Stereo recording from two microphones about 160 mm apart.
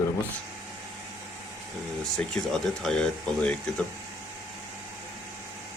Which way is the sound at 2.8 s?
5° left (ahead or behind).